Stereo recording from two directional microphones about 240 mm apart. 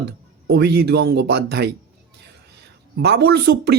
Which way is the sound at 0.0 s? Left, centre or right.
Right.